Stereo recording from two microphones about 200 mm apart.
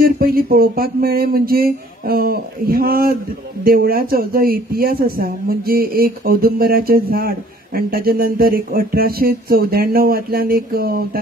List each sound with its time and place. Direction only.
0.0 s speech: 50° right (ahead or behind)